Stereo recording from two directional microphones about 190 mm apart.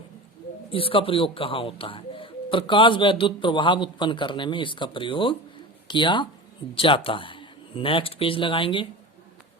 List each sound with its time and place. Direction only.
0.7 s speech: 30° left (ahead or behind)